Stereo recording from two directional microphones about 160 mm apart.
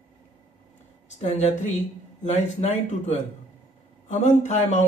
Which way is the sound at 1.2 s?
45° left (ahead or behind).